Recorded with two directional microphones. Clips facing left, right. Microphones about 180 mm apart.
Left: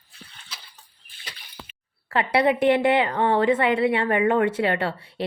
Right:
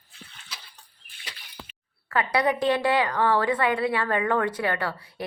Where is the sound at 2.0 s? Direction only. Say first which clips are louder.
Left 3 dB; 25° left (ahead or behind).